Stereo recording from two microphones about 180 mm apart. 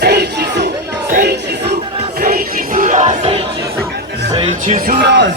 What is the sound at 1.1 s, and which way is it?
Music, 65° right (ahead or behind).